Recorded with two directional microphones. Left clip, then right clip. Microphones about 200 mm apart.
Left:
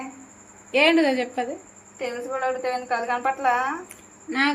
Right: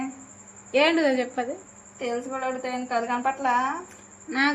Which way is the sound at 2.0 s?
30° left (ahead or behind).